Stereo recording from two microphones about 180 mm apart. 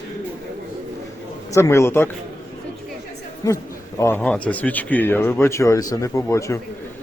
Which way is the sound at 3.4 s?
20° left (ahead or behind).